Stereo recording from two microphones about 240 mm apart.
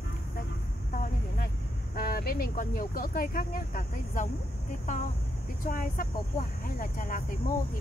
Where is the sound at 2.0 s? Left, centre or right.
Left.